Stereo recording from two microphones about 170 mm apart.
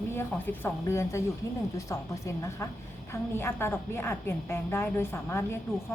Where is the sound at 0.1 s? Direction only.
15° left (ahead or behind).